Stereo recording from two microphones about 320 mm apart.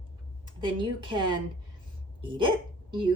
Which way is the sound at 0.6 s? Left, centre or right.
Centre.